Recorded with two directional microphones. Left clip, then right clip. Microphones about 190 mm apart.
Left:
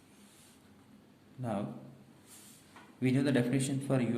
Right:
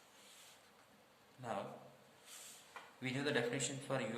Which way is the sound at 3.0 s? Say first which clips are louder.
Left 7 dB; 30° left (ahead or behind).